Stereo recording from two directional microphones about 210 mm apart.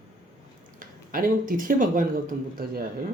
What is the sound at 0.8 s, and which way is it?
Speech, 40° right (ahead or behind).